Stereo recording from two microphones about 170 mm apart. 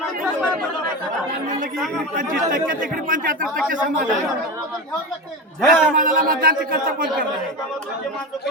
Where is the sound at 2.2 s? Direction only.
55° right (ahead or behind).